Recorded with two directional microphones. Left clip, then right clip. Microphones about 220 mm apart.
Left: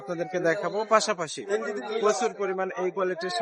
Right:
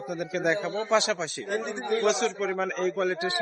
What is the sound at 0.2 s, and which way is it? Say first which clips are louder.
A man's voice: left 1 dB; 15° left (ahead or behind).